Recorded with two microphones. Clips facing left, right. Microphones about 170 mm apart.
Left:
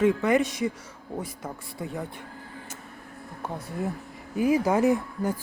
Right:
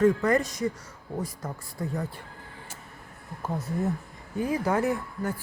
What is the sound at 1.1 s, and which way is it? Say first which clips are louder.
Speech: right 1 dB; centre (ahead or behind).